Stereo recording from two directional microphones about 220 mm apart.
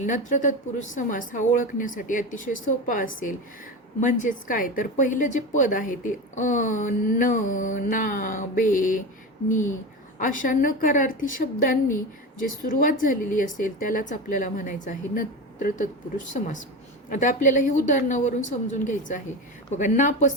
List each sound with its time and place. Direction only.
0.0 s a woman's voice: 35° left (ahead or behind)